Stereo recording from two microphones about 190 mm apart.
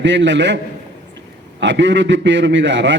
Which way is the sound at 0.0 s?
70° right (ahead or behind).